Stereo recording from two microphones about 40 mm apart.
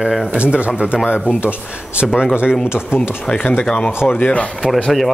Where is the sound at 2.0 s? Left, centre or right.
Right.